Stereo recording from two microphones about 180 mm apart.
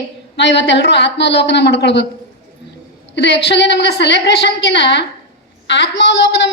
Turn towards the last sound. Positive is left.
turn(degrees=75)  # may be behind; listen again after turning